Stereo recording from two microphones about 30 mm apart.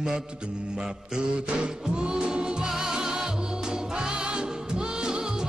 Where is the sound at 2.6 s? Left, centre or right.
Centre.